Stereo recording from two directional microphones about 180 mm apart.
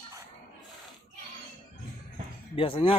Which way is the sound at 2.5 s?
30° left (ahead or behind).